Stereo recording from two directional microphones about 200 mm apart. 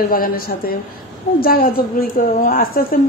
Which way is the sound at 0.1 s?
45° left (ahead or behind).